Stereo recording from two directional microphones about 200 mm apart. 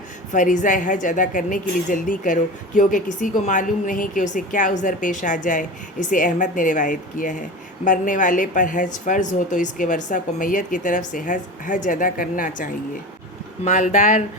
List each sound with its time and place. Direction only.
0.3 s a woman's voice: 40° left (ahead or behind)
13.7 s a woman's voice: 35° left (ahead or behind)